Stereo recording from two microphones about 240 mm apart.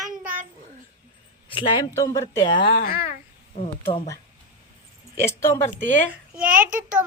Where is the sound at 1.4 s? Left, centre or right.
Left.